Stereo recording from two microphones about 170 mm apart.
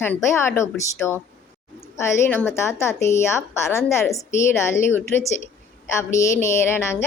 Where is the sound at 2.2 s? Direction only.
10° left (ahead or behind).